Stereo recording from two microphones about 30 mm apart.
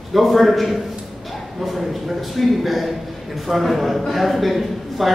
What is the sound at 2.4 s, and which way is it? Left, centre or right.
A man's voice, centre.